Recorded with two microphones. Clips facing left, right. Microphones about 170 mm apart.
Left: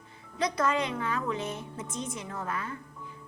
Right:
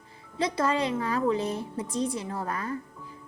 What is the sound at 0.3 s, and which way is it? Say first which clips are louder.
Speech: right 2 dB; 30° right (ahead or behind).